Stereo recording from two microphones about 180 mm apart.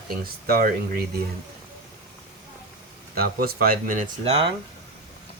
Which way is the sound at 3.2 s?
55° right (ahead or behind).